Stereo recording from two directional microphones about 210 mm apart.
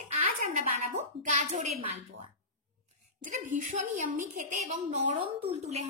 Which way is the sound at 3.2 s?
35° right (ahead or behind).